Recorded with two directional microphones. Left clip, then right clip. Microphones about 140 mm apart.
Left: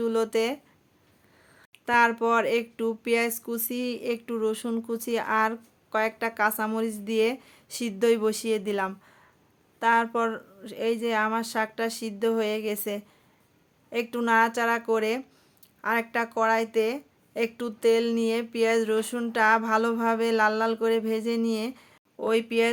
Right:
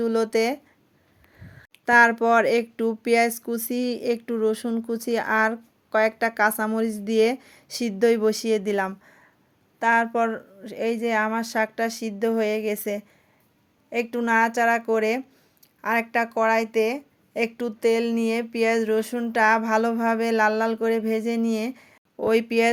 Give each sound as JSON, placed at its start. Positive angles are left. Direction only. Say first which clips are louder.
{"t": 0.0, "sound": "speech", "louder": "right 3 dB", "side_deg": -25}
{"t": 8.9, "sound": "a sound", "louder": "right 3 dB", "side_deg": -20}
{"t": 9.7, "sound": "speech", "louder": "right 2 dB", "side_deg": -20}